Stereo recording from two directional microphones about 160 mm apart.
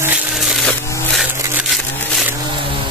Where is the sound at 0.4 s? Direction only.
Centre (ahead or behind).